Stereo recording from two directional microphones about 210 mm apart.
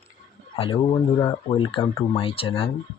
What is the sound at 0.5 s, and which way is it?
Speech, 30° left (ahead or behind).